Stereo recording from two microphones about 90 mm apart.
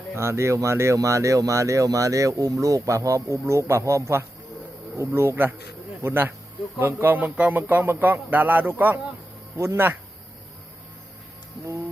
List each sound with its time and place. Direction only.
0.2 s speech: 30° right (ahead or behind)